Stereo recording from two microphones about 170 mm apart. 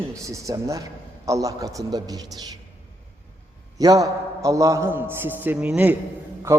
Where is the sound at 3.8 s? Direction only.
20° right (ahead or behind).